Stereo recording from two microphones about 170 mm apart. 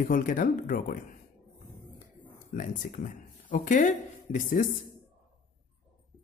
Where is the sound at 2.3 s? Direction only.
50° left (ahead or behind).